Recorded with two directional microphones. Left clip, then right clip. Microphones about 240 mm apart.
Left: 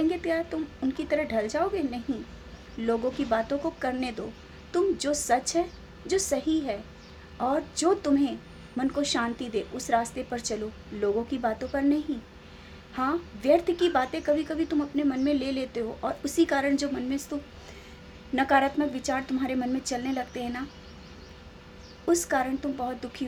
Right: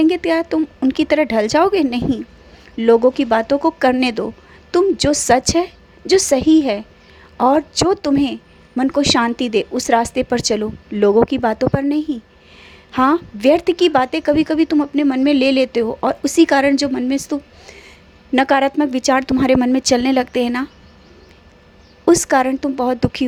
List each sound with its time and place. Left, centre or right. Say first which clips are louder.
0.0 s speech: right 12 dB; right
22.0 s speech: right 12 dB; right